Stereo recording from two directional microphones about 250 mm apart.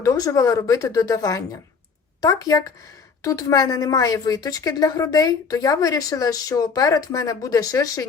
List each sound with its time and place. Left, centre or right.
0.0 s a woman's voice: centre